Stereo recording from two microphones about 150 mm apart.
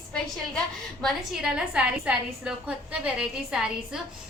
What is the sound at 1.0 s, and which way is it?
A woman's voice, 5° right (ahead or behind).